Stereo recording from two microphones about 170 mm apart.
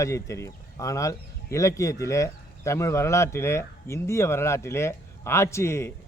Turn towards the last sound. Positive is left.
turn(degrees=15)  # may be behind; listen again after turning